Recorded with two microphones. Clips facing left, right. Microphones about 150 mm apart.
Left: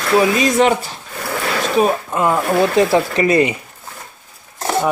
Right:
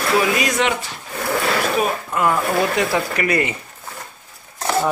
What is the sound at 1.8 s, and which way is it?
Speech, 25° left (ahead or behind).